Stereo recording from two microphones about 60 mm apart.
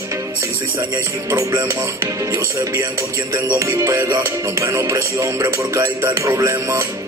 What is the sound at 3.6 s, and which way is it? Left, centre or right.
Speech, right.